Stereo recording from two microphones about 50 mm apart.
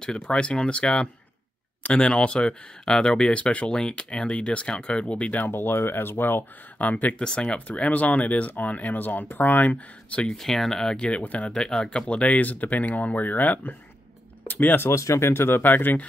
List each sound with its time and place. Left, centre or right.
0.0 s speech: centre
5.4 s speech: left
6.8 s speech: left
7.2 s speech: left
10.3 s speech: centre
11.0 s speech: left
11.5 s speech: centre
12.1 s speech: left
14.8 s speech: left